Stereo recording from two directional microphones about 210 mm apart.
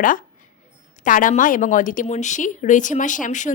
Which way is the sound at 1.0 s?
40° left (ahead or behind).